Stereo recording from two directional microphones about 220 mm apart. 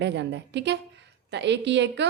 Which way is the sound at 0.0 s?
50° right (ahead or behind).